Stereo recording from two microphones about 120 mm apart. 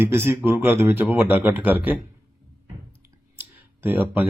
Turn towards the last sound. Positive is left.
turn(degrees=-15)  # may be behind; listen again after turning